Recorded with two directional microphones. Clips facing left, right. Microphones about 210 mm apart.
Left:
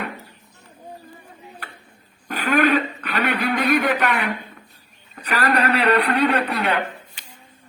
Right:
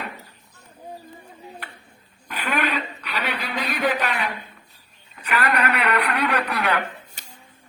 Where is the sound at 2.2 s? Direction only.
45° left (ahead or behind).